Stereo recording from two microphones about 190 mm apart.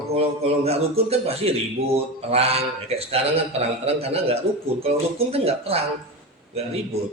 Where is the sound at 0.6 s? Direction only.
35° right (ahead or behind).